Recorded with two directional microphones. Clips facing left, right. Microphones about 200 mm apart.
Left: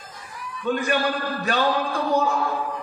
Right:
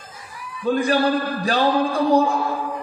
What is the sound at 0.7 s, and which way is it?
Speech, 35° right (ahead or behind).